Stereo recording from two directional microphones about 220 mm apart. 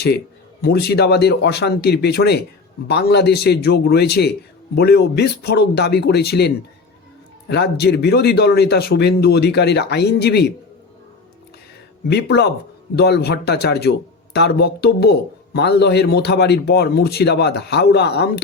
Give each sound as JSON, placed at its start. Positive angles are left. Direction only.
{"t": 0.6, "sound": "a man's voice", "side_deg": 45}
{"t": 12.0, "sound": "a man's voice", "side_deg": 50}